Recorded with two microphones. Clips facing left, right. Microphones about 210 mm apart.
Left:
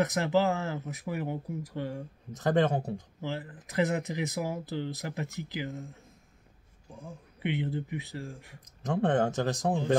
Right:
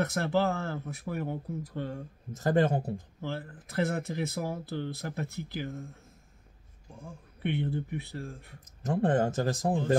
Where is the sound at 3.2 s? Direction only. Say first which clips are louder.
Left 1 dB; 15° left (ahead or behind).